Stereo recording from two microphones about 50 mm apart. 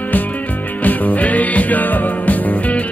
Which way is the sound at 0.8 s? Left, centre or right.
Left.